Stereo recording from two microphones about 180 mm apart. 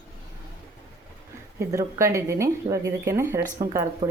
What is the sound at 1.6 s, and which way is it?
Speech, 15° right (ahead or behind).